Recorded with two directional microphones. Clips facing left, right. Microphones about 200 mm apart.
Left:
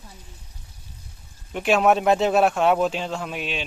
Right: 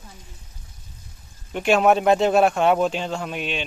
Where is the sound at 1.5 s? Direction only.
Centre (ahead or behind).